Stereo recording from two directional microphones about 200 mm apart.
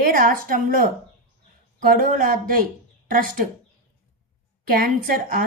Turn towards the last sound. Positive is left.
turn(degrees=-50)  # may be behind; listen again after turning